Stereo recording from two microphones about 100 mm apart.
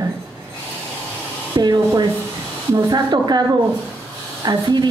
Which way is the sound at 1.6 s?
45° right (ahead or behind).